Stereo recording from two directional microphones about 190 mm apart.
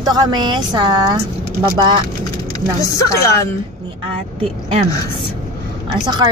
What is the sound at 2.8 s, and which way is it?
Speech, 15° left (ahead or behind).